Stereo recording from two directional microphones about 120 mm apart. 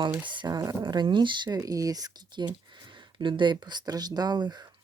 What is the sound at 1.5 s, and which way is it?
Speech, 30° right (ahead or behind).